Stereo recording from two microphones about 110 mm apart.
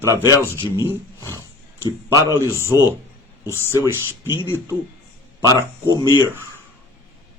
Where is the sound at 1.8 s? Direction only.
25° right (ahead or behind).